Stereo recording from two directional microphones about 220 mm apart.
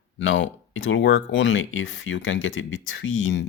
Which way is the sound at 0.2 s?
60° left (ahead or behind).